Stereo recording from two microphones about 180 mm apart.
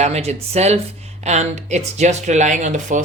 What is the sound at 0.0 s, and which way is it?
Speech, 35° right (ahead or behind).